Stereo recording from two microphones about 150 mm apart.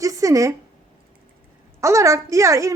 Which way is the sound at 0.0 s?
20° right (ahead or behind).